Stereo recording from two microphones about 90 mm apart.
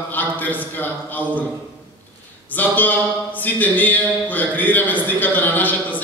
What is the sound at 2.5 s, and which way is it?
Speech, 20° left (ahead or behind).